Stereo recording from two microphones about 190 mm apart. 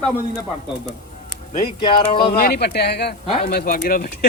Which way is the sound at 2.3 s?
55° left (ahead or behind).